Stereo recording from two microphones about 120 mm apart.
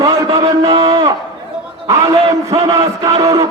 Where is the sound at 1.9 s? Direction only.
25° right (ahead or behind).